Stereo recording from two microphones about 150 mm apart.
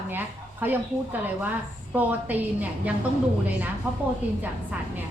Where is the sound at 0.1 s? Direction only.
15° right (ahead or behind).